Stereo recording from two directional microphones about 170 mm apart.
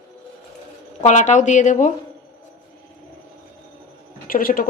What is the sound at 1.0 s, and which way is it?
Speech, 45° left (ahead or behind).